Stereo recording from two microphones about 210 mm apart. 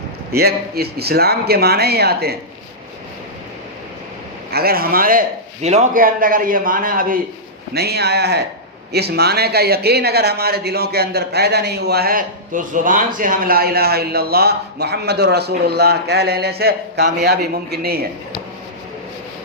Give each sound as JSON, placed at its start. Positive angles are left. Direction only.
{"t": 0.3, "sound": "speech", "side_deg": -50}
{"t": 4.5, "sound": "a man's voice", "side_deg": -45}